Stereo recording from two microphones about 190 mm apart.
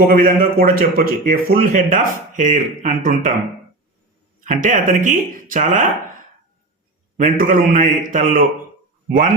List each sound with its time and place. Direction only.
0.1 s speech: 50° right (ahead or behind)
4.4 s speech: 40° right (ahead or behind)
7.2 s speech: 45° right (ahead or behind)